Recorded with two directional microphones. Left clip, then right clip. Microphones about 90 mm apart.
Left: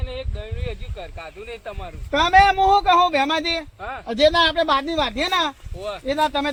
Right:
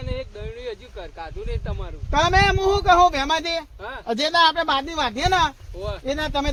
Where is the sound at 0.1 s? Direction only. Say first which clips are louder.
Right 1 dB; 30° right (ahead or behind).